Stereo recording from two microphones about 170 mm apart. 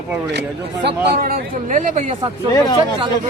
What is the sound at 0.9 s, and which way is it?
Speech, 65° right (ahead or behind).